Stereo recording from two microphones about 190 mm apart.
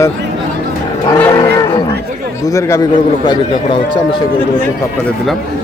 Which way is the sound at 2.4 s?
15° left (ahead or behind).